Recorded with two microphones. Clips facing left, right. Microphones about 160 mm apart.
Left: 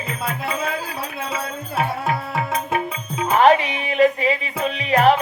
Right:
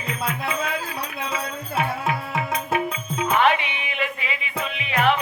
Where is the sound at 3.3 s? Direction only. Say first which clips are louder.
Left 6 dB; 40° left (ahead or behind).